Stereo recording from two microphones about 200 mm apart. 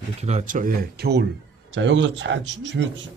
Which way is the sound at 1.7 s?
65° right (ahead or behind).